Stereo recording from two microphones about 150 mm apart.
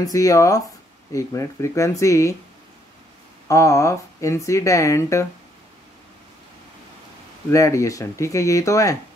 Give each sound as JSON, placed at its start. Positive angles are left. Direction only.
{"t": 0.0, "sound": "speech", "side_deg": 25}
{"t": 3.4, "sound": "speech", "side_deg": 20}
{"t": 7.5, "sound": "speech", "side_deg": 20}